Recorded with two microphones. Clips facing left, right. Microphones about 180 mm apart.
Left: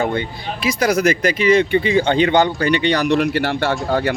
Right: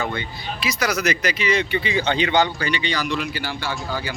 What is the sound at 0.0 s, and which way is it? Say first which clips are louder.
Speech: left 6 dB; 50° left (ahead or behind).